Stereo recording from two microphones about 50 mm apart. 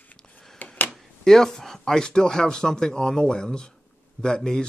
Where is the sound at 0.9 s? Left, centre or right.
Centre.